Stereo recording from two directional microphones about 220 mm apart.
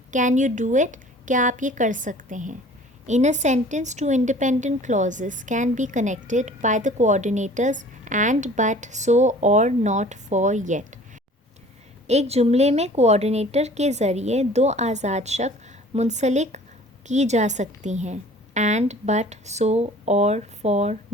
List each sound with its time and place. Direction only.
0.1 s a woman's voice: 35° right (ahead or behind)
12.0 s a woman's voice: 30° right (ahead or behind)